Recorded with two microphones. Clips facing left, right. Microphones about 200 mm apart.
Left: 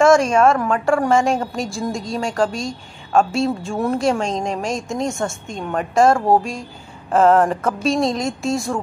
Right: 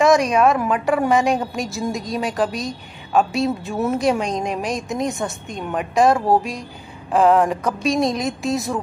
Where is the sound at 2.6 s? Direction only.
Centre (ahead or behind).